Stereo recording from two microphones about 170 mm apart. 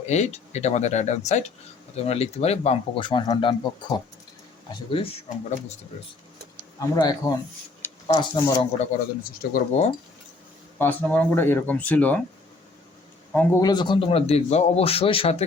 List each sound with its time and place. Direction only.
0.1 s a man's voice: 40° left (ahead or behind)
6.7 s speech: 20° left (ahead or behind)
9.5 s speech: 55° left (ahead or behind)
10.8 s speech: 10° left (ahead or behind)
13.3 s a man's voice: 20° left (ahead or behind); by 15.4 s 35° left (ahead or behind)